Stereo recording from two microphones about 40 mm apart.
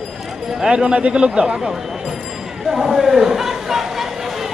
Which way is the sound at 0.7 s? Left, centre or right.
Right.